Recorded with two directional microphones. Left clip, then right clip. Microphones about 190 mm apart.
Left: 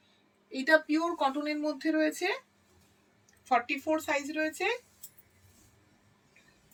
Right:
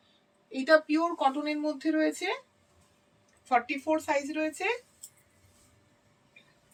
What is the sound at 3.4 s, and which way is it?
Speech, 20° right (ahead or behind).